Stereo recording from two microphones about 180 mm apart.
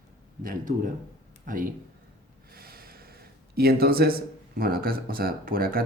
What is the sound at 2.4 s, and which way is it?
Snort, 60° right (ahead or behind).